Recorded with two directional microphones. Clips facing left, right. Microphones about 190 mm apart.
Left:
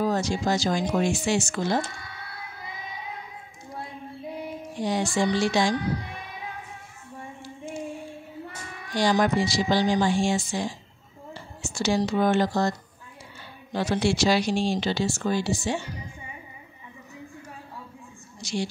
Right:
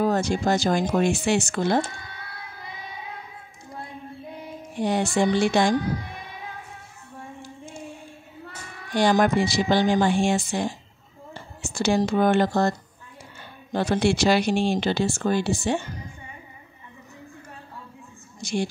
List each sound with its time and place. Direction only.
0.0 s speech: 55° right (ahead or behind)
4.7 s speech: 60° right (ahead or behind)
8.9 s speech: 55° right (ahead or behind)
18.4 s speech: 55° right (ahead or behind)